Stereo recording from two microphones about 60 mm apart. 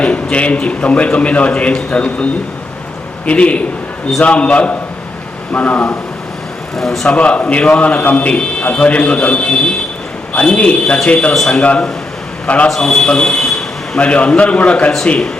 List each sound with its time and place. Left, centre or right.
0.0 s a man's voice: left
3.2 s a man's voice: left
6.7 s speech: centre
7.1 s a man's voice: centre
12.6 s a man's voice: centre
14.0 s a man's voice: left